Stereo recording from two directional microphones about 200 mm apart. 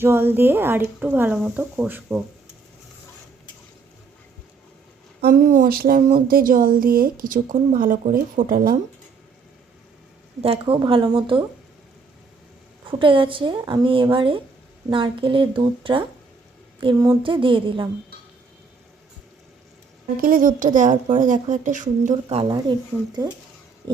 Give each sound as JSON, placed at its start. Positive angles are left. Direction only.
{"t": 0.0, "sound": "speech", "side_deg": -10}
{"t": 5.2, "sound": "speech", "side_deg": -45}
{"t": 10.4, "sound": "speech", "side_deg": -25}
{"t": 12.9, "sound": "speech", "side_deg": -25}
{"t": 20.1, "sound": "speech", "side_deg": -45}